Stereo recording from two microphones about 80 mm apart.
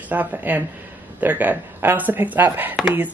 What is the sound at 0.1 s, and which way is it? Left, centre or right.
Speech, right.